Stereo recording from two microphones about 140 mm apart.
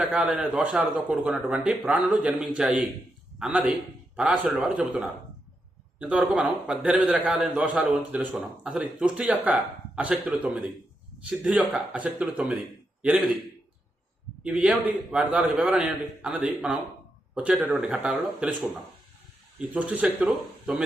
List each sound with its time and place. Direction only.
0.0 s a man's voice: 5° right (ahead or behind)
14.4 s a man's voice: 10° right (ahead or behind)
19.5 s a man's voice: 10° right (ahead or behind)